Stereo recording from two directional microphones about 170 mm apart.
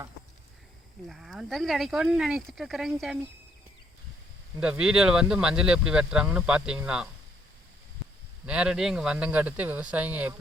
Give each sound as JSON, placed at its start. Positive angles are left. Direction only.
{"t": 1.0, "sound": "speech", "side_deg": 0}
{"t": 4.6, "sound": "speech", "side_deg": -5}
{"t": 8.4, "sound": "speech", "side_deg": -5}